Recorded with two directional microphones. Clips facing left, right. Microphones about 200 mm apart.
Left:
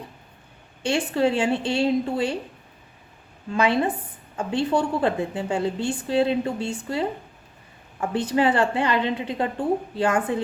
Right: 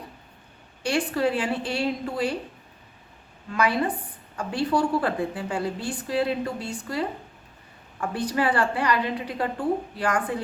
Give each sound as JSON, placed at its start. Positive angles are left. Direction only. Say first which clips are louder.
{"t": 0.8, "sound": "a woman's voice", "louder": "left 2 dB", "side_deg": 25}
{"t": 3.5, "sound": "a woman's voice", "louder": "left 3 dB", "side_deg": 25}
{"t": 8.0, "sound": "a woman's voice", "louder": "left 4 dB", "side_deg": 25}